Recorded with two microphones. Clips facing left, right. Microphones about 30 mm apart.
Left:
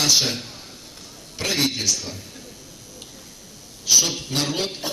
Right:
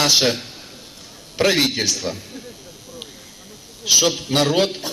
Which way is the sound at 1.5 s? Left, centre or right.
Right.